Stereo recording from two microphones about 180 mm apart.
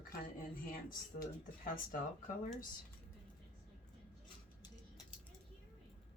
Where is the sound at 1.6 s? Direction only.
50° left (ahead or behind).